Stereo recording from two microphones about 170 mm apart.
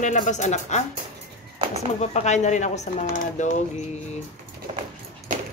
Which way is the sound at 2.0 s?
40° left (ahead or behind).